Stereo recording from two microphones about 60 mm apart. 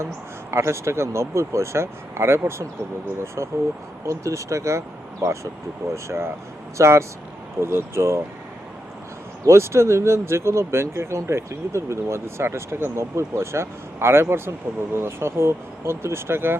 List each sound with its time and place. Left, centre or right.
0.5 s speech: right
9.5 s speech: right